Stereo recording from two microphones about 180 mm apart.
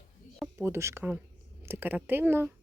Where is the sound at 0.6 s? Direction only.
15° right (ahead or behind).